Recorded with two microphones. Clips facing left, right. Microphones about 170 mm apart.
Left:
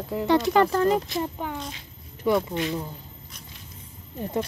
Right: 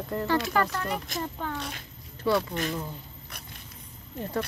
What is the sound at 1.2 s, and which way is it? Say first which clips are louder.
Speech: left 2 dB; 15° left (ahead or behind).